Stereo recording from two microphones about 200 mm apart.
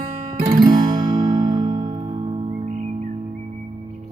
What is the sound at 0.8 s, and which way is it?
Music, 25° right (ahead or behind).